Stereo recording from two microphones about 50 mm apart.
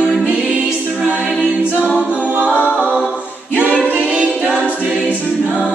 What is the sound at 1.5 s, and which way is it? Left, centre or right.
A capella, left.